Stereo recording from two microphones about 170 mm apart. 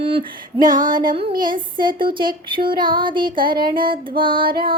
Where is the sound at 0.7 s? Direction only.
55° right (ahead or behind).